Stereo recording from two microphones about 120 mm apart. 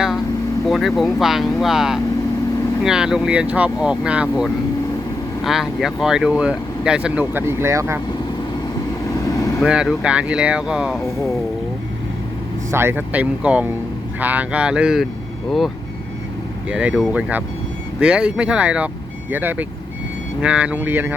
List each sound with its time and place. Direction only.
0.6 s speech: centre (ahead or behind); by 7.9 s 25° right (ahead or behind)
9.0 s vehicle: 30° left (ahead or behind)
9.6 s speech: 5° right (ahead or behind)
12.7 s speech: 20° right (ahead or behind)
16.6 s speech: 10° right (ahead or behind)